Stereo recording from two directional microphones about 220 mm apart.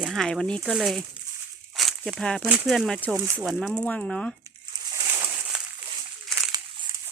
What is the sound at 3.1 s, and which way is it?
Speech, 15° right (ahead or behind).